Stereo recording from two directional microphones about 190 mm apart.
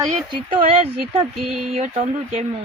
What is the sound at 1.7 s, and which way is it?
Speech, 35° right (ahead or behind).